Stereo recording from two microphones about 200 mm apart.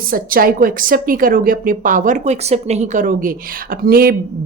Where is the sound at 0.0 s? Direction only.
45° right (ahead or behind).